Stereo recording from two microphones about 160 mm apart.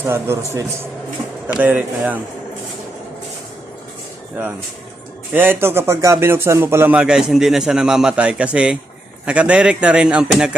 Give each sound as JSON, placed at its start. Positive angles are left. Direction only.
{"t": 0.0, "sound": "speech", "side_deg": -15}
{"t": 5.3, "sound": "speech", "side_deg": -15}